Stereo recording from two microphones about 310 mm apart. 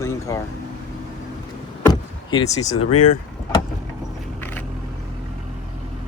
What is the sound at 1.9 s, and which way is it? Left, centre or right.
Door, centre.